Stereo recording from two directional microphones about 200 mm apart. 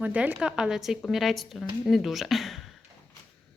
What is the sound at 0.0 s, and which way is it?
A woman's voice, 5° right (ahead or behind).